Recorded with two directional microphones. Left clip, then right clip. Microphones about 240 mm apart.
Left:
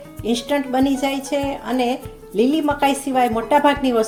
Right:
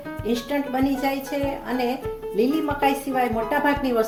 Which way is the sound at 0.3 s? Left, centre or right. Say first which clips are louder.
Left 5 dB; left.